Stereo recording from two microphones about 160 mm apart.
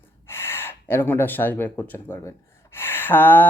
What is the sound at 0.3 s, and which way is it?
Gasp, 15° left (ahead or behind).